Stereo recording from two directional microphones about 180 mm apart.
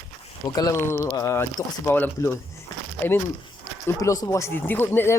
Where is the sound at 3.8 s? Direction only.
20° left (ahead or behind).